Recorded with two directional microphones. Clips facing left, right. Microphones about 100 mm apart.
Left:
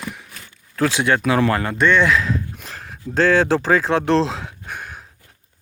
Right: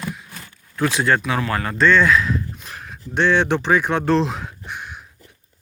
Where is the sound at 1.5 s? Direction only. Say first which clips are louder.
Left 3 dB; 30° left (ahead or behind).